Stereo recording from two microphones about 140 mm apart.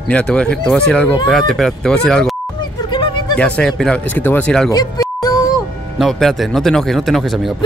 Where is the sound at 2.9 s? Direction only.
35° left (ahead or behind).